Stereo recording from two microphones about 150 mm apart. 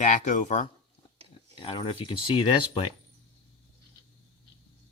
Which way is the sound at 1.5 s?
35° left (ahead or behind).